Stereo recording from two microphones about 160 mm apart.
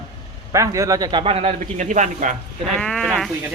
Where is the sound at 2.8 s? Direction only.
5° left (ahead or behind).